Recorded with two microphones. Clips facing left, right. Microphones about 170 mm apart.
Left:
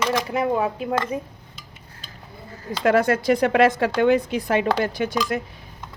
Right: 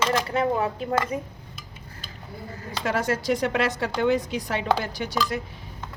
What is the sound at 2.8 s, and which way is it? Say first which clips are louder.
Speech: left 7 dB; 55° left (ahead or behind).